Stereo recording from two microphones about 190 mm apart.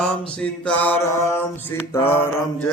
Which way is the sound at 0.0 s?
5° left (ahead or behind).